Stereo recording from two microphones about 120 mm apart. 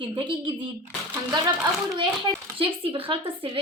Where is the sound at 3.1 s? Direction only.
50° right (ahead or behind).